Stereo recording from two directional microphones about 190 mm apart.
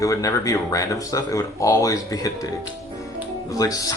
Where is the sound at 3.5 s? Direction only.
20° left (ahead or behind).